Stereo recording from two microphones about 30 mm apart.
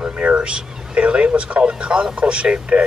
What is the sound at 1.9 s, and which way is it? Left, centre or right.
Speech, right.